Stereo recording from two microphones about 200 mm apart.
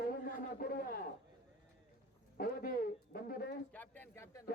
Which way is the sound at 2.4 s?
45° left (ahead or behind).